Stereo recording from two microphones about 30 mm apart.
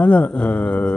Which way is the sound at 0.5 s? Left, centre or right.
Left.